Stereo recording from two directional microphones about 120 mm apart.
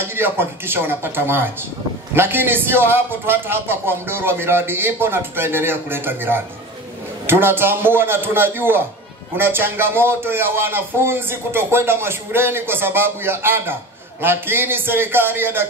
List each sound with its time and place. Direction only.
0.0 s a man's voice: 20° right (ahead or behind)